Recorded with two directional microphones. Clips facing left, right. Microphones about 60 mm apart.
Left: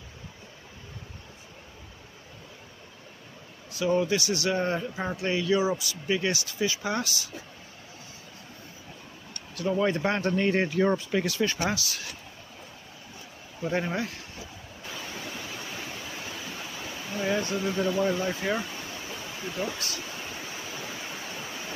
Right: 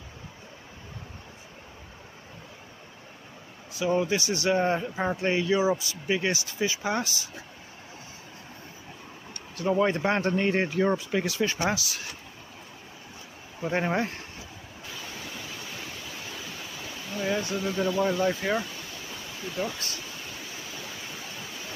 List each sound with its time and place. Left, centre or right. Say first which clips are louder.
3.7 s speech: even; centre
4.2 s speech: right 2 dB; right
9.6 s speech: right 1 dB; right
13.6 s speech: right 2 dB; right
14.9 s pink noise: left 2 dB; centre
17.6 s speech: even; centre
18.6 s a sound: left 1 dB; centre
20.9 s pink noise: left 2 dB; centre